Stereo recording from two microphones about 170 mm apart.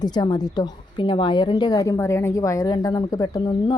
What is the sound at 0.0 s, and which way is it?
A woman's voice, 25° left (ahead or behind).